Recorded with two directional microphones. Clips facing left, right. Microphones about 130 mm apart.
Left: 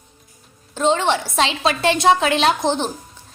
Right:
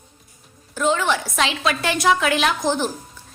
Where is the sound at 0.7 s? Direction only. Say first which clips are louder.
Left 2 dB; 25° left (ahead or behind).